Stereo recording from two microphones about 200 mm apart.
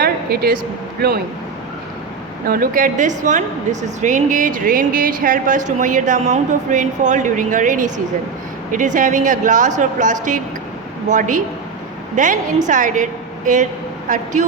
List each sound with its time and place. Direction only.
0.0 s a sound: 50° right (ahead or behind)
1.0 s speech: 50° right (ahead or behind)
2.5 s a woman's voice: 45° right (ahead or behind)